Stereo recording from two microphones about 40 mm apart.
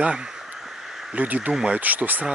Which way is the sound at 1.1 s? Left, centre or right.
Right.